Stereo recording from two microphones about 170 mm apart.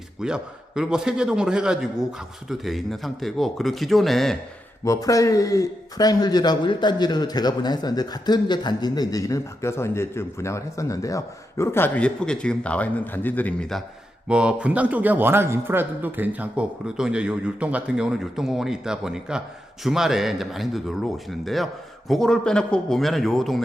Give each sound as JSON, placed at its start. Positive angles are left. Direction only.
{"t": 0.2, "sound": "speech", "side_deg": -5}
{"t": 4.9, "sound": "a man's voice", "side_deg": 20}